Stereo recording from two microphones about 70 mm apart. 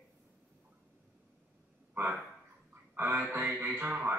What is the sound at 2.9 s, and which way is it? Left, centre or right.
Quack, right.